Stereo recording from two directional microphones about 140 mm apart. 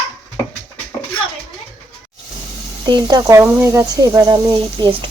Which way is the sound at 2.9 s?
30° right (ahead or behind).